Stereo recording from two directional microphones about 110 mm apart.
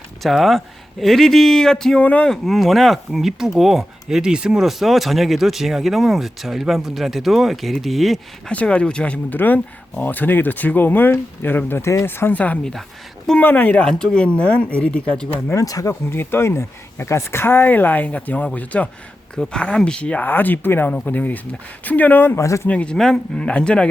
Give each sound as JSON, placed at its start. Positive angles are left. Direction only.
{"t": 0.2, "sound": "speech", "side_deg": 0}
{"t": 2.3, "sound": "speech", "side_deg": 0}
{"t": 15.5, "sound": "speech", "side_deg": 30}
{"t": 22.4, "sound": "speech", "side_deg": 25}
{"t": 22.7, "sound": "speech", "side_deg": 10}